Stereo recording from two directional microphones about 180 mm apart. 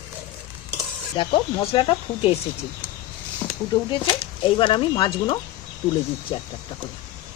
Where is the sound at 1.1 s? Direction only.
30° left (ahead or behind).